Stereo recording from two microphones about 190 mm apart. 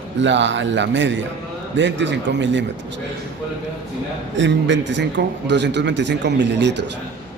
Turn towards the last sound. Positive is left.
turn(degrees=-65)  # may be behind; listen again after turning